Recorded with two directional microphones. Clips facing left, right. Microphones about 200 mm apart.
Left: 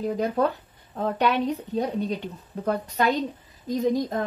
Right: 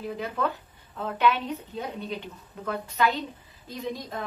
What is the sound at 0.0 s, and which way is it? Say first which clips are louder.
Speech: left 6 dB; 40° left (ahead or behind).